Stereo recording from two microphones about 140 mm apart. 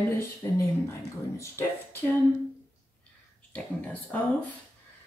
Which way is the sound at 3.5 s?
10° left (ahead or behind).